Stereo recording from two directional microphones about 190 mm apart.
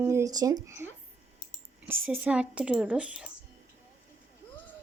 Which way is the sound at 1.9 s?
5° right (ahead or behind).